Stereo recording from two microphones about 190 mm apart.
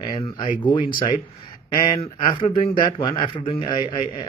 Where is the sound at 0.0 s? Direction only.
25° left (ahead or behind).